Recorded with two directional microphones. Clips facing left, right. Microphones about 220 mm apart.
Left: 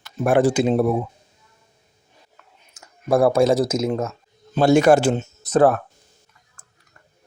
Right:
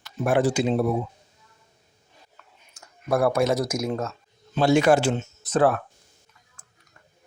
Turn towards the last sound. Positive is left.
turn(degrees=40)  # may be behind; listen again after turning